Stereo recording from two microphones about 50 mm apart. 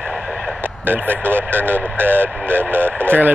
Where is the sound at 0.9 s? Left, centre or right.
Right.